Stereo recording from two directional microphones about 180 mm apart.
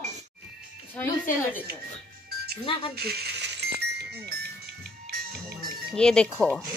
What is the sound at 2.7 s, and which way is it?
Speech, 30° left (ahead or behind).